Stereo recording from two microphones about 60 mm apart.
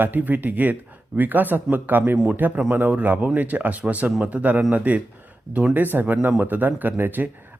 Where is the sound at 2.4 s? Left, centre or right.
Right.